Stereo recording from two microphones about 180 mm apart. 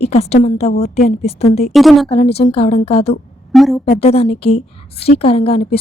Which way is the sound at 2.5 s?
35° left (ahead or behind).